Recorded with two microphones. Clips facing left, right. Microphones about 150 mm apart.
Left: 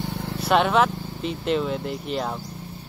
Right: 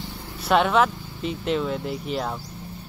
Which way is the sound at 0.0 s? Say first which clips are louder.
Left 7 dB; 65° left (ahead or behind).